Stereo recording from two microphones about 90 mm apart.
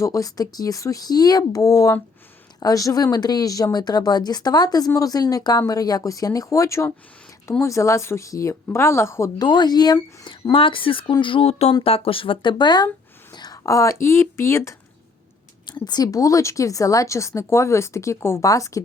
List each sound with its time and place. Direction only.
0.0 s a woman's voice: 40° left (ahead or behind)
9.4 s speech: 50° left (ahead or behind)
10.5 s speech: 75° left (ahead or behind); by 14.8 s 35° left (ahead or behind)
15.6 s a woman's voice: 55° left (ahead or behind); by 18.8 s 40° left (ahead or behind)